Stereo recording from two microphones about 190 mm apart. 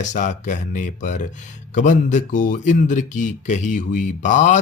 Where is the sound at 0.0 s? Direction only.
40° left (ahead or behind).